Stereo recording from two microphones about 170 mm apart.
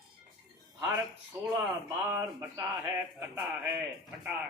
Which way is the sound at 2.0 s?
15° right (ahead or behind).